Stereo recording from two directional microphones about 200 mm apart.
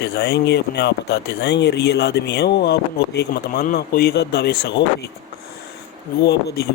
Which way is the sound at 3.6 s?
45° left (ahead or behind).